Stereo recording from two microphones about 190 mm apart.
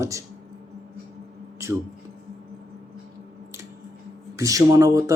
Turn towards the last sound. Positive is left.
turn(degrees=-20)  # may be behind; listen again after turning